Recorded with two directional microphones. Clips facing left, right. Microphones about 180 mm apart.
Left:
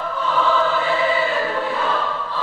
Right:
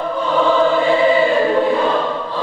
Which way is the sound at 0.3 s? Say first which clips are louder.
Right 5 dB; 20° right (ahead or behind).